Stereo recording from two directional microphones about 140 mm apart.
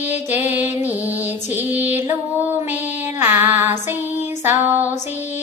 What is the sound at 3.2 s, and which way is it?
Music, 15° right (ahead or behind).